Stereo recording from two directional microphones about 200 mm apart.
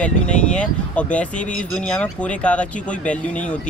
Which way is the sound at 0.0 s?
5° left (ahead or behind).